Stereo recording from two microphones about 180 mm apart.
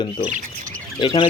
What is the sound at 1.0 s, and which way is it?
Speech, 30° left (ahead or behind).